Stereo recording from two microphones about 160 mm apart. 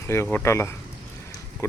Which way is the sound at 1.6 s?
20° left (ahead or behind).